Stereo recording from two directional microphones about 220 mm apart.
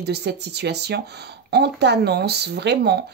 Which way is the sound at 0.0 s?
50° right (ahead or behind).